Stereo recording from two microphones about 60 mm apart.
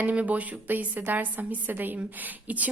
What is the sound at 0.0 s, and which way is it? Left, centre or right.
Speech, right.